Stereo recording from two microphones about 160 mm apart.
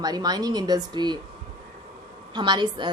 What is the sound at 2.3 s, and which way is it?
Speech, 30° right (ahead or behind).